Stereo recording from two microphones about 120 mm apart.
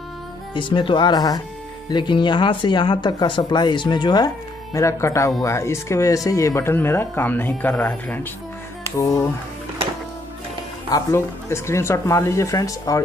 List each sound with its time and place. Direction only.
0.6 s speech: 45° left (ahead or behind)
4.7 s speech: 25° left (ahead or behind)
10.9 s speech: 25° left (ahead or behind)